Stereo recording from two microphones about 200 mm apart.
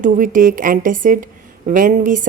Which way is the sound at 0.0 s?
40° right (ahead or behind).